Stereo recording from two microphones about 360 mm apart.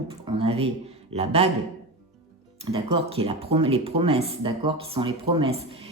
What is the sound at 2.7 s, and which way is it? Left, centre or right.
Speech, centre.